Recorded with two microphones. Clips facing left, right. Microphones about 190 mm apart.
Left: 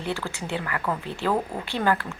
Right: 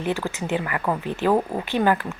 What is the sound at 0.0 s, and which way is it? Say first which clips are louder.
A woman's voice: right 5 dB; 15° right (ahead or behind).